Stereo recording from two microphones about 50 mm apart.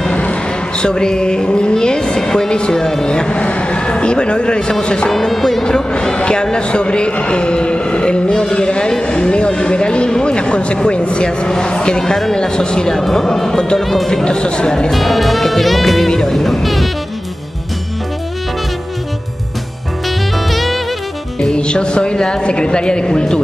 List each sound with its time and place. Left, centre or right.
0.1 s music: left; by 2.5 s centre
2.5 s a man's voice: centre
5.1 s a man's voice: centre
14.9 s music: centre
20.4 s saxophone: centre
21.4 s speech: centre